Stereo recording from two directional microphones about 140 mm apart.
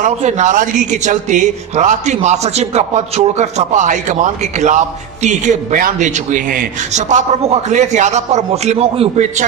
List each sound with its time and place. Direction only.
0.0 s a man's voice: 55° right (ahead or behind)